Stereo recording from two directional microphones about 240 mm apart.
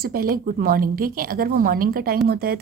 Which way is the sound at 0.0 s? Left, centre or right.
Right.